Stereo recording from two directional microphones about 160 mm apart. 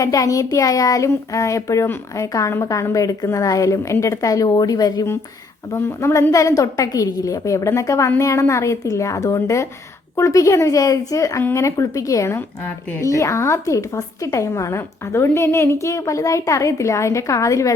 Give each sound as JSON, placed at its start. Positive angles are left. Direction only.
{"t": 0.0, "sound": "a woman's voice", "side_deg": 20}